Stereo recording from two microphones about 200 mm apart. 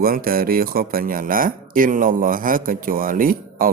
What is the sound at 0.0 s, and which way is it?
Speech, 45° right (ahead or behind).